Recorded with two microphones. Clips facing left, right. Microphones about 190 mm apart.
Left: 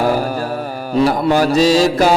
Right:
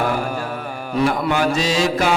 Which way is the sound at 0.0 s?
35° left (ahead or behind).